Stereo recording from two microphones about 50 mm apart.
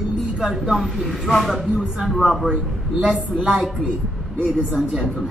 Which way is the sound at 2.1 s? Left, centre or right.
Centre.